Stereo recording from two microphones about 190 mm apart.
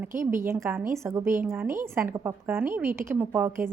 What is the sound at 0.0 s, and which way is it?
A woman's voice, 10° right (ahead or behind).